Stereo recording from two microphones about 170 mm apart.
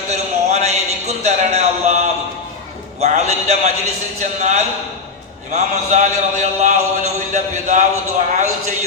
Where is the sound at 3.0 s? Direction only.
40° right (ahead or behind).